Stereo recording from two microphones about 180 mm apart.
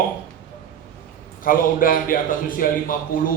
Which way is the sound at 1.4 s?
50° left (ahead or behind).